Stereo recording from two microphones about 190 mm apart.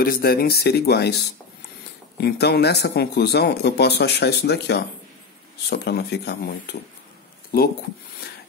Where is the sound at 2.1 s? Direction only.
60° left (ahead or behind).